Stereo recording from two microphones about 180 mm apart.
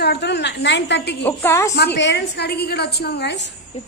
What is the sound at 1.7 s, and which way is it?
A woman's voice, 65° left (ahead or behind).